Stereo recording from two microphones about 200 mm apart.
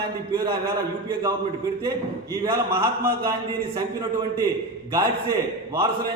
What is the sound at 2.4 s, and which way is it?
Speech, 10° right (ahead or behind).